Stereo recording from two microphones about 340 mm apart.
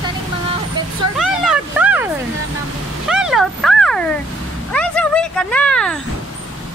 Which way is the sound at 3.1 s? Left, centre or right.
Centre.